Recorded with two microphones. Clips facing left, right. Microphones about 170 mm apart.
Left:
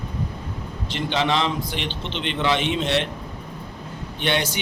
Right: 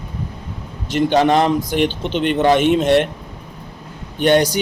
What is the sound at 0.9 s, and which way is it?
A man's voice, 45° right (ahead or behind).